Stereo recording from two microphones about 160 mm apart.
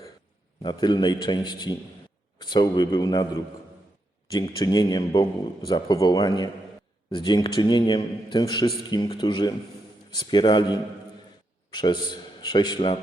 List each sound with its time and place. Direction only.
0.6 s a man's voice: 30° left (ahead or behind)
4.5 s a man's voice: 25° left (ahead or behind)